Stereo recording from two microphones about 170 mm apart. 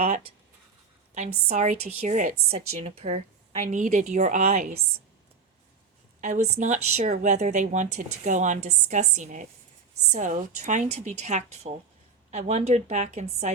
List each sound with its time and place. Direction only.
1.5 s a woman's voice: 40° right (ahead or behind)
6.2 s a woman's voice: 45° right (ahead or behind)